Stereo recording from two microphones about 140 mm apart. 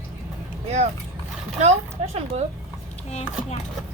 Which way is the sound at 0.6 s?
50° right (ahead or behind).